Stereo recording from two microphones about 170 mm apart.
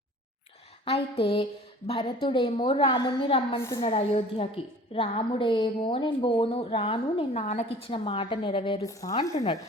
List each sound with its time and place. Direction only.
0.9 s a woman's voice: 35° left (ahead or behind)
3.6 s a woman's voice: 20° left (ahead or behind)
3.8 s a woman's voice: 35° left (ahead or behind); by 9.3 s 20° left (ahead or behind)
9.3 s a woman's voice: 40° left (ahead or behind)